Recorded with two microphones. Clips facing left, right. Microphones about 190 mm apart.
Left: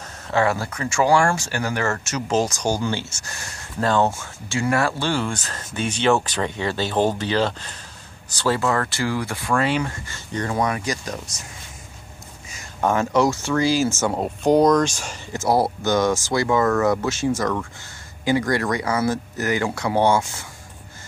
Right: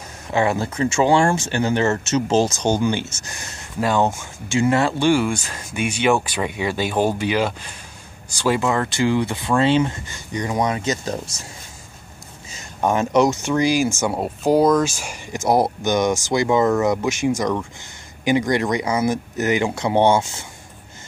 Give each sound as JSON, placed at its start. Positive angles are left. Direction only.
{"t": 0.3, "sound": "speech", "side_deg": -20}
{"t": 12.4, "sound": "speech", "side_deg": -20}